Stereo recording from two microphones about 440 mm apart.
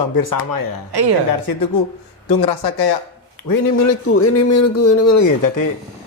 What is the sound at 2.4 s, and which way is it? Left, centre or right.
Speech, left.